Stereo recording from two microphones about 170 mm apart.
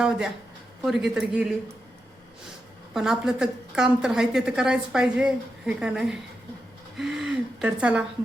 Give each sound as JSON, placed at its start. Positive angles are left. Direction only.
{"t": 0.8, "sound": "a woman's voice", "side_deg": 0}
{"t": 2.9, "sound": "a woman's voice", "side_deg": 0}